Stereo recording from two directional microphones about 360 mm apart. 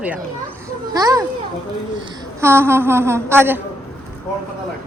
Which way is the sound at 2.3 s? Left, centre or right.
Centre.